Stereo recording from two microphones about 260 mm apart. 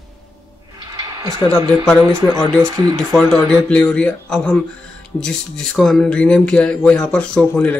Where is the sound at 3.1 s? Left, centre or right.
Centre.